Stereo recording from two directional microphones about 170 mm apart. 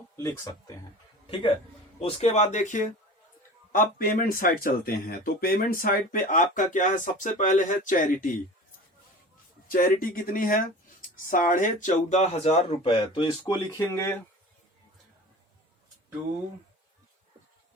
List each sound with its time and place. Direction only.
0.2 s speech: 15° left (ahead or behind)
2.0 s speech: 35° left (ahead or behind)
9.6 s speech: 55° left (ahead or behind); by 13.3 s 30° left (ahead or behind)
13.7 s speech: 15° left (ahead or behind)